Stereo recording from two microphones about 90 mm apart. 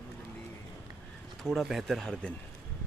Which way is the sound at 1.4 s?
5° right (ahead or behind).